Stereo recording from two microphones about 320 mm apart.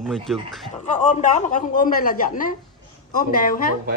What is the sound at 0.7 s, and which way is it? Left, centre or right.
A woman's voice, left.